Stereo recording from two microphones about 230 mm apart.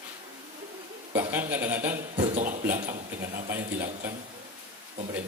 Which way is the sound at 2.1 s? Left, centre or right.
Right.